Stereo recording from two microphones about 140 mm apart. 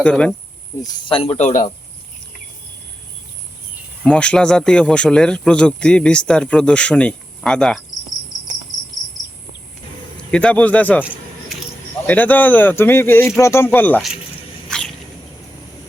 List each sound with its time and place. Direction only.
0.0 s speech: 10° left (ahead or behind)
1.0 s speech: 40° left (ahead or behind); by 1.7 s 60° left (ahead or behind)
4.0 s speech: 5° left (ahead or behind)
10.3 s speech: 10° left (ahead or behind)
12.0 s speech: 10° left (ahead or behind)
14.7 s a sound: 5° left (ahead or behind)